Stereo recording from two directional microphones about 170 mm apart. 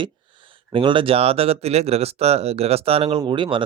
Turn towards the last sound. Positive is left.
turn(degrees=-30)  # may be behind; listen again after turning